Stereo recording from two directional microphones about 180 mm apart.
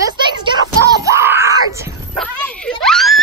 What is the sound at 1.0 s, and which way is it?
Screaming, 15° right (ahead or behind).